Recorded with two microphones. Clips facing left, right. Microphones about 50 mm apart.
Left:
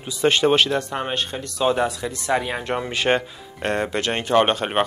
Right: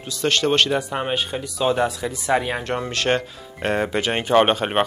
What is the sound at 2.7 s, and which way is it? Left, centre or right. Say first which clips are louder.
Speech: left 1 dB; centre.